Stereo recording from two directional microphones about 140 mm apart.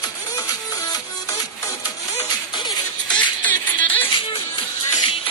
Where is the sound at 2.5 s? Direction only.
30° left (ahead or behind).